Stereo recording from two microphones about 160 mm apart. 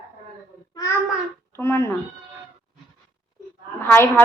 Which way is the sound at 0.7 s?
20° left (ahead or behind).